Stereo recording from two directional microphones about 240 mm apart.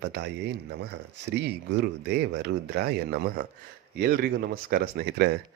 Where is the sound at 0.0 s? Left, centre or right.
Right.